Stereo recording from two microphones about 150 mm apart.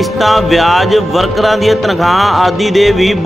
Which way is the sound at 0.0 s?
Centre (ahead or behind).